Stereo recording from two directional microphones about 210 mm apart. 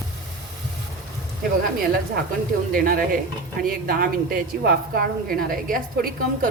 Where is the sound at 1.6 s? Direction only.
45° right (ahead or behind).